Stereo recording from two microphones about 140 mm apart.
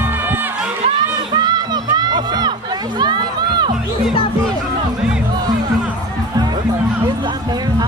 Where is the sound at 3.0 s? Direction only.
30° right (ahead or behind).